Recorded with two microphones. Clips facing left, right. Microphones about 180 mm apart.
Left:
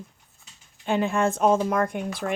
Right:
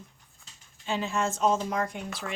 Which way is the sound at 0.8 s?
55° left (ahead or behind).